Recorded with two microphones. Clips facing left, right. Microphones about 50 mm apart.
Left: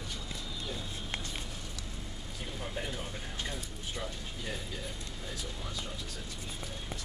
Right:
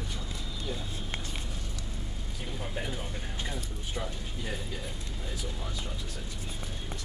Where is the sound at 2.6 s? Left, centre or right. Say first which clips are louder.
Right 2 dB; centre.